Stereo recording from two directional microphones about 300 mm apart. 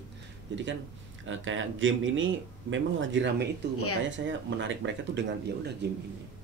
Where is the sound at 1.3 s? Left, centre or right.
Right.